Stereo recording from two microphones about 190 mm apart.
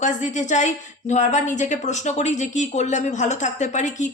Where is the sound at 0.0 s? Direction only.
40° left (ahead or behind).